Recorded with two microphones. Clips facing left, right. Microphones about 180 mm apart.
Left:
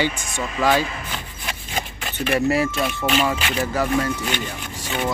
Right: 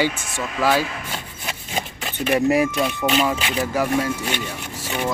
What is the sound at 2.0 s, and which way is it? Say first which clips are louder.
Speech: right 2 dB; 20° right (ahead or behind).